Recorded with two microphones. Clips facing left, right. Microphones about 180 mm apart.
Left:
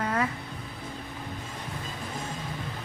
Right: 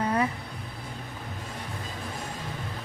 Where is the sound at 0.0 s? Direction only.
15° right (ahead or behind).